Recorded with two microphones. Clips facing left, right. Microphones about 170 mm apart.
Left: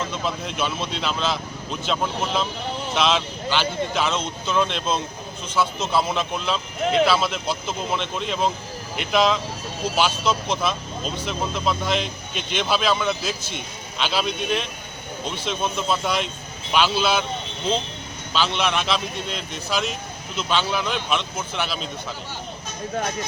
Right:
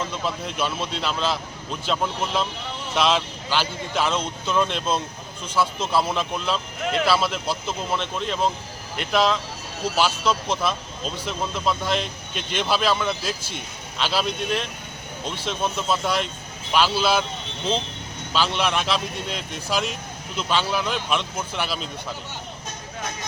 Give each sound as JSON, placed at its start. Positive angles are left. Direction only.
{"t": 0.0, "sound": "speech", "side_deg": -5}
{"t": 18.3, "sound": "speech", "side_deg": -5}